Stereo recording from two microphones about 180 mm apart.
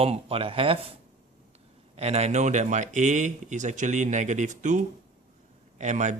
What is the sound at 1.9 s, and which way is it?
Speech, 35° right (ahead or behind).